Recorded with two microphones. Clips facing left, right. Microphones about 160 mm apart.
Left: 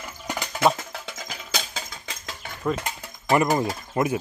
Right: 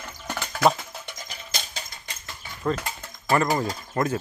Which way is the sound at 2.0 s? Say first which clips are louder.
Left 4 dB; 90° left.